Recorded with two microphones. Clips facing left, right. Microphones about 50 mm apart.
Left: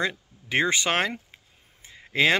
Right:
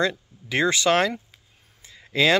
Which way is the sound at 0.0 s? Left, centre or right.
Left.